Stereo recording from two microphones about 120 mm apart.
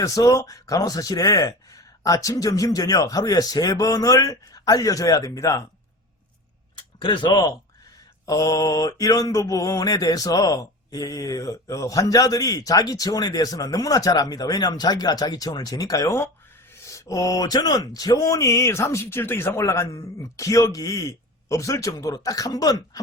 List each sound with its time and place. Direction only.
0.0 s mantra: 25° left (ahead or behind)
6.7 s speech: 40° left (ahead or behind)
8.3 s mantra: 25° left (ahead or behind)